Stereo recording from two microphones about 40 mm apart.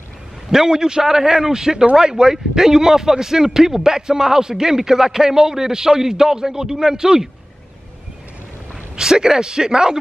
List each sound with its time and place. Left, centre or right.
0.5 s speech: centre
8.9 s speech: centre